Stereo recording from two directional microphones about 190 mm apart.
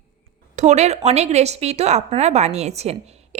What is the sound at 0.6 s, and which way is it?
A woman's voice, 35° right (ahead or behind).